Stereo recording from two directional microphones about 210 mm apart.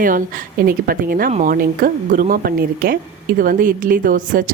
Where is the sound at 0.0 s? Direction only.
40° right (ahead or behind).